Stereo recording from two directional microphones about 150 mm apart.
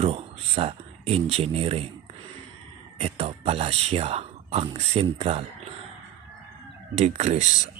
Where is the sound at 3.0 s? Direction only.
40° right (ahead or behind).